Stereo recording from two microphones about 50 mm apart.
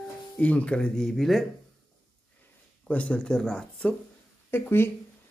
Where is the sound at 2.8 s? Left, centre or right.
Left.